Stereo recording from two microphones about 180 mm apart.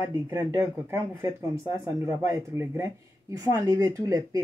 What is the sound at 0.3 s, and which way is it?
Speech, 15° right (ahead or behind).